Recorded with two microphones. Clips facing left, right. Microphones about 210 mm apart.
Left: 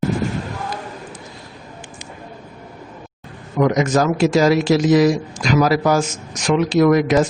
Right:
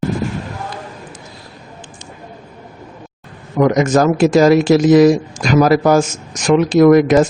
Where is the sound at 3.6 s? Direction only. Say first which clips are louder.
Right 4 dB; 50° right (ahead or behind).